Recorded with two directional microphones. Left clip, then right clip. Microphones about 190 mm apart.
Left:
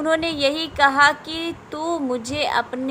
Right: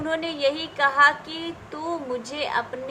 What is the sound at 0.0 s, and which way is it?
A woman's voice, 35° left (ahead or behind).